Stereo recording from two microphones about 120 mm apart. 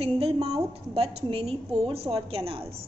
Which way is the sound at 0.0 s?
55° right (ahead or behind).